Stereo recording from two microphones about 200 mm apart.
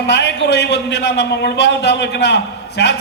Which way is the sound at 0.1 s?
60° left (ahead or behind).